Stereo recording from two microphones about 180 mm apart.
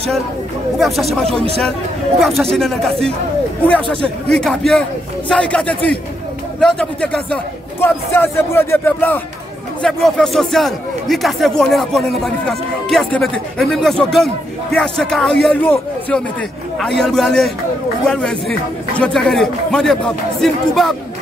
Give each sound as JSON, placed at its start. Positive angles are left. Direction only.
{"t": 0.7, "sound": "speech", "side_deg": 0}
{"t": 2.1, "sound": "speech", "side_deg": 0}
{"t": 16.7, "sound": "speech", "side_deg": 0}